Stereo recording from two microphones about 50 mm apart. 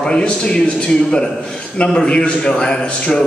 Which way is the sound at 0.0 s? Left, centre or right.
Centre.